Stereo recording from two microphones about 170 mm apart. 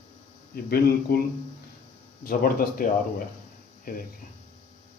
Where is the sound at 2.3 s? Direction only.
55° left (ahead or behind).